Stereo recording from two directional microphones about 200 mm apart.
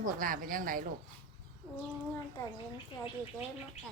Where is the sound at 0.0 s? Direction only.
45° right (ahead or behind).